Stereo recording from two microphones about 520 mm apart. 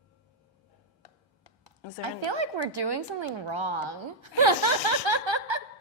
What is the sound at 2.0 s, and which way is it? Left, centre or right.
A woman's voice, right.